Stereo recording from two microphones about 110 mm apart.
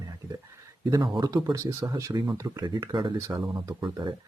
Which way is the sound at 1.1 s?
35° right (ahead or behind).